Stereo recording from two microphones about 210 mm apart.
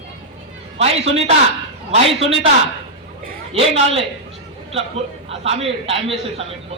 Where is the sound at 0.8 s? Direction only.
30° right (ahead or behind).